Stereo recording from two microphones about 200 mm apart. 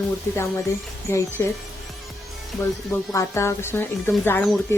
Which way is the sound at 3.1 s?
15° left (ahead or behind).